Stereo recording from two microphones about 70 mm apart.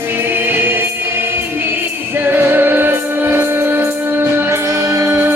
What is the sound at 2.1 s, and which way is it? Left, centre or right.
Music, right.